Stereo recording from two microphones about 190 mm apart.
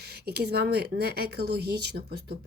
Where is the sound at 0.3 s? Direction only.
55° right (ahead or behind).